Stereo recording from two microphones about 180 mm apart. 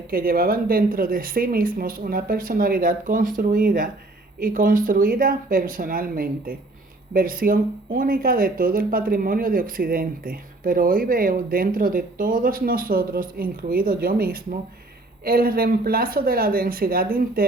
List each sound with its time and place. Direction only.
0.1 s speech: 55° right (ahead or behind)